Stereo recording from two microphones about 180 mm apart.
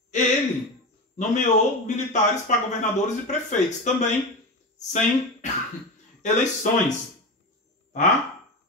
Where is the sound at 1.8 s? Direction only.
40° left (ahead or behind).